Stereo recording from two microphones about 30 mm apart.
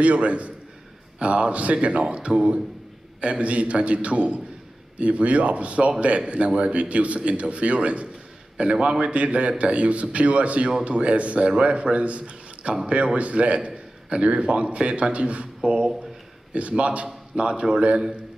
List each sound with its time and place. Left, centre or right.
0.0 s a man's voice: right
8.5 s a man's voice: right
13.7 s a sound: right
14.2 s a man's voice: right